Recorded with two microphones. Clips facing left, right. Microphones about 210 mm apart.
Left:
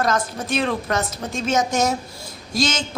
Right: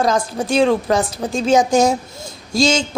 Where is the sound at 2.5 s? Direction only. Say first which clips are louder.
Right 6 dB; 30° right (ahead or behind).